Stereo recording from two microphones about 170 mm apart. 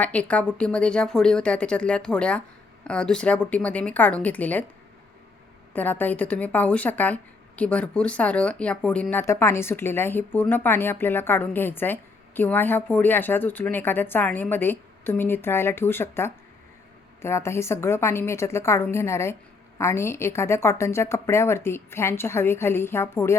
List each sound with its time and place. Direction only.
0.0 s speech: 10° left (ahead or behind)
5.7 s speech: 10° left (ahead or behind)